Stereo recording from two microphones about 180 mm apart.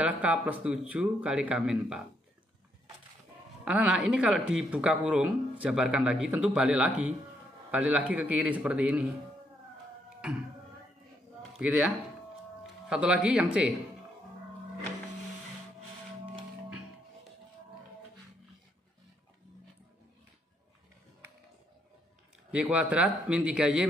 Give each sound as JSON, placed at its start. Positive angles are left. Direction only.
{"t": 0.0, "sound": "speech", "side_deg": -10}
{"t": 3.6, "sound": "speech", "side_deg": -5}
{"t": 11.6, "sound": "speech", "side_deg": -5}
{"t": 12.9, "sound": "speech", "side_deg": -5}
{"t": 22.5, "sound": "speech", "side_deg": -5}